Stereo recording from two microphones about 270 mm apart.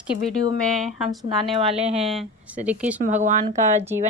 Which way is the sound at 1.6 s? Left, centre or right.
Right.